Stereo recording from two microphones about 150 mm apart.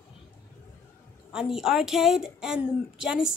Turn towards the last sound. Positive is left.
turn(degrees=-5)  # may be behind; listen again after turning